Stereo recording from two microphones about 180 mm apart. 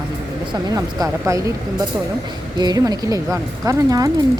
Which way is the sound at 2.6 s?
20° right (ahead or behind).